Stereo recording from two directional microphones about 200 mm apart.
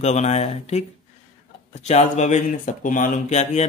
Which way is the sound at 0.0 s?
35° left (ahead or behind).